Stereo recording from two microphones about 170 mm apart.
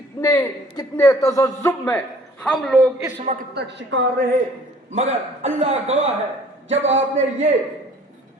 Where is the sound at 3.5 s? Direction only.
85° right.